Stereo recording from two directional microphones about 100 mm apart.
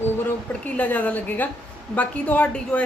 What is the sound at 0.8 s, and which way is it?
A woman's voice, 15° left (ahead or behind).